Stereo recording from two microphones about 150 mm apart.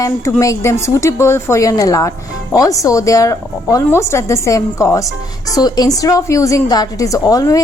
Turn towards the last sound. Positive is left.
turn(degrees=25)  # may be behind; listen again after turning